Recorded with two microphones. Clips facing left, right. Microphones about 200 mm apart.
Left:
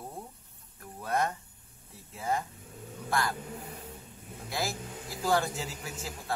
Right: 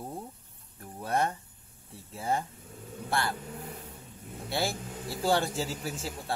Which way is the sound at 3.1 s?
30° right (ahead or behind).